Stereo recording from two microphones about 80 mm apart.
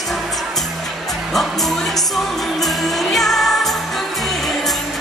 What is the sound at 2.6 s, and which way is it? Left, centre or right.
Music, centre.